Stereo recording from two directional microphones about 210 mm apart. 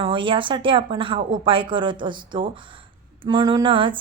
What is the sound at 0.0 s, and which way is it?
Speech, 25° right (ahead or behind).